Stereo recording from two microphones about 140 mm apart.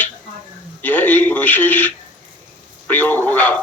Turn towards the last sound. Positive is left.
turn(degrees=10)  # may be behind; listen again after turning